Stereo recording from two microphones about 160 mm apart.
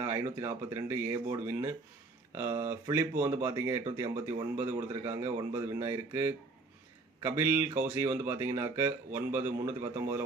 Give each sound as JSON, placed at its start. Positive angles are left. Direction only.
{"t": 0.0, "sound": "speech", "side_deg": -15}